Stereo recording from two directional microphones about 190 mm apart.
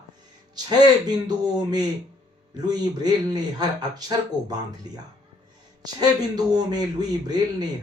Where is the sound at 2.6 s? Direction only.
20° right (ahead or behind).